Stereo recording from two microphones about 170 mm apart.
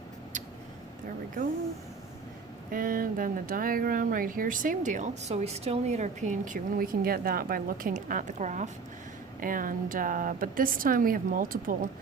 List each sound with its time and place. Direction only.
2.6 s speech: 55° right (ahead or behind)
9.4 s speech: 55° right (ahead or behind)